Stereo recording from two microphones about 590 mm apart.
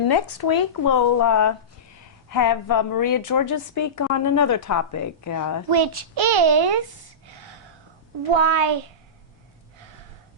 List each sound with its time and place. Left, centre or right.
0.1 s a woman's voice: left
5.7 s a child's voice: right
8.3 s a child's voice: right